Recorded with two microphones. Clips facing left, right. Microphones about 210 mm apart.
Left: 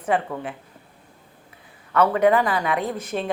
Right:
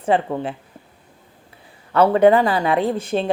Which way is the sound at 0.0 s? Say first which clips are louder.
Right 4 dB; 30° right (ahead or behind).